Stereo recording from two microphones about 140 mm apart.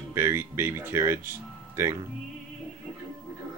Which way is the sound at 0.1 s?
15° right (ahead or behind).